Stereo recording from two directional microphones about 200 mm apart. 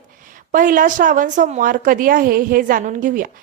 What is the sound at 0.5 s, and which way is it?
A woman's voice, 45° right (ahead or behind).